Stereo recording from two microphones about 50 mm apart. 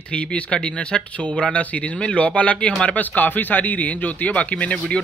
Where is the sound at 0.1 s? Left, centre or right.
Centre.